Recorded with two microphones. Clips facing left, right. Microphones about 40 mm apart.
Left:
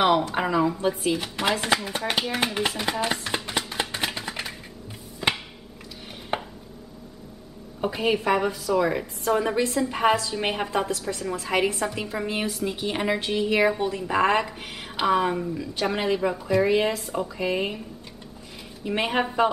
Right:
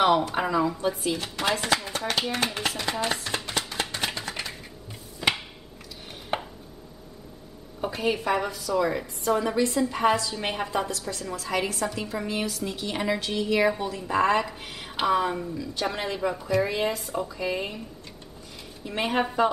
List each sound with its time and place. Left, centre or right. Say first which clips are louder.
0.0 s a woman's voice: left 1 dB; centre
2.9 s chopping: left 2 dB; centre
3.9 s a sound: left 1 dB; centre
6.3 s chopping: left 1 dB; centre
7.8 s a woman's voice: left 3 dB; centre
15.0 s a woman's voice: left 2 dB; centre
18.9 s a woman's voice: left 2 dB; centre